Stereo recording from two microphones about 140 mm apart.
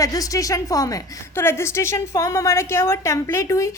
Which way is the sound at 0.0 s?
25° left (ahead or behind).